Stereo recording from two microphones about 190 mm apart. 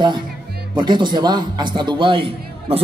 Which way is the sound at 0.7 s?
25° right (ahead or behind).